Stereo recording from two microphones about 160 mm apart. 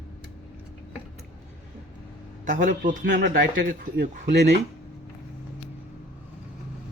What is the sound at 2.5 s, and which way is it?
Speech, 55° right (ahead or behind).